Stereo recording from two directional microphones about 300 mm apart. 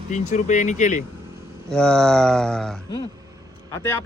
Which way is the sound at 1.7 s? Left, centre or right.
Centre.